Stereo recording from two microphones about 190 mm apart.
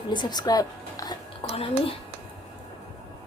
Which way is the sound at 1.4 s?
30° left (ahead or behind).